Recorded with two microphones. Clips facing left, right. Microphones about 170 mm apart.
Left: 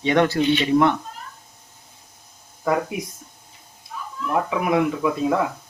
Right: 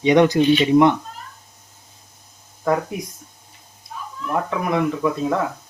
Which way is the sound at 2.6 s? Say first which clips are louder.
Right 1 dB; 5° left (ahead or behind).